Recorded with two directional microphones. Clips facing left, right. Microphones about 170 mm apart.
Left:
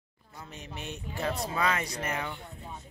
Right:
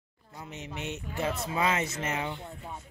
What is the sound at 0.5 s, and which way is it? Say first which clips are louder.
Speech: right 4 dB; 20° right (ahead or behind).